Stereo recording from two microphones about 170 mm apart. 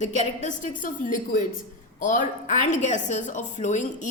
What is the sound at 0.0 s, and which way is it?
A woman's voice, 45° left (ahead or behind).